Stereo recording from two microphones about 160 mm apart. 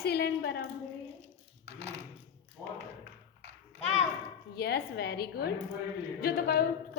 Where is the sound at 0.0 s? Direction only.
85° left.